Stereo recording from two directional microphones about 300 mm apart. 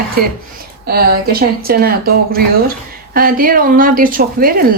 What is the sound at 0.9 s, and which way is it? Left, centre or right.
A woman's voice, right.